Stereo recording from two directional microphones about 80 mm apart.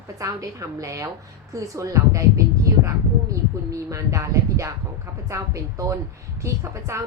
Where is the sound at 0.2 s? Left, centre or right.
Right.